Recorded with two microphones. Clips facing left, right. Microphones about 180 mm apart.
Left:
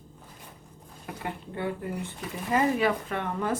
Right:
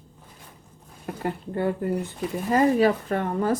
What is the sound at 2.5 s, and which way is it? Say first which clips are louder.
Speech: right 5 dB; 40° right (ahead or behind).